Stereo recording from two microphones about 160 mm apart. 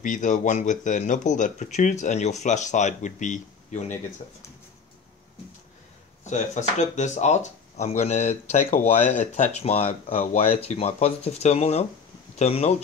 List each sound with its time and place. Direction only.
0.0 s speech: 55° left (ahead or behind)
6.2 s speech: 50° left (ahead or behind)